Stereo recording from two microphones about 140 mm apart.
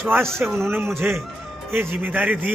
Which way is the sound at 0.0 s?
15° right (ahead or behind).